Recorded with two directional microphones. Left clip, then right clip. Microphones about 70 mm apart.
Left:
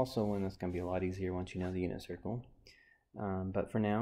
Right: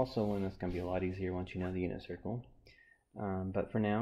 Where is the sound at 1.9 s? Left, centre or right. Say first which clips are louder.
Even; left.